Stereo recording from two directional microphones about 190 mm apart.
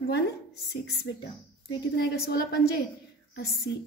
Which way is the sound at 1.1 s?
75° left (ahead or behind).